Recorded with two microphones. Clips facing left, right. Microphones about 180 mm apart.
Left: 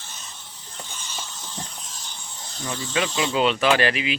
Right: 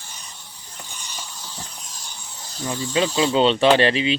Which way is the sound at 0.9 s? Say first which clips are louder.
Even; 15° right (ahead or behind).